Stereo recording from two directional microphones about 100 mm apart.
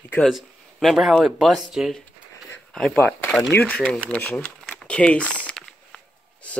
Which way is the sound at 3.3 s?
5° left (ahead or behind).